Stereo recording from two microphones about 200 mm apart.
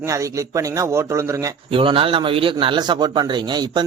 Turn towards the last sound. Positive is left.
turn(degrees=-20)  # may be behind; listen again after turning